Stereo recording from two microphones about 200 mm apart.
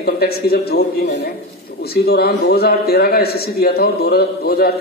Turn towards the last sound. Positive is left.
turn(degrees=50)  # may be behind; listen again after turning